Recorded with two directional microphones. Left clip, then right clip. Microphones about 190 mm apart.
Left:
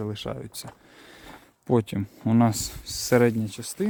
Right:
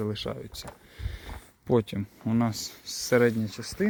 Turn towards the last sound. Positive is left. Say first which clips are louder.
# left 1 dB
turn(degrees=45)  # may be behind; listen again after turning